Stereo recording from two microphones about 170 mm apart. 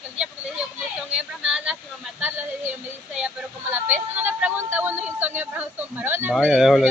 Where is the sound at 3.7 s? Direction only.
10° right (ahead or behind).